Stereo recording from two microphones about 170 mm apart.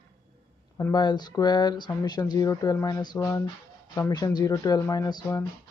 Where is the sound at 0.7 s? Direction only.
20° left (ahead or behind).